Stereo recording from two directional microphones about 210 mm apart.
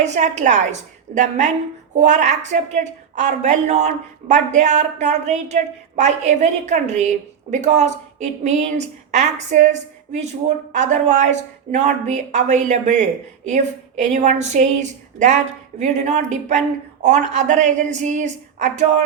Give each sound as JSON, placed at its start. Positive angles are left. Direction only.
{"t": 0.0, "sound": "a woman's voice", "side_deg": -35}